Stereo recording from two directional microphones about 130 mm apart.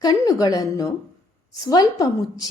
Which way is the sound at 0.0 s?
30° left (ahead or behind).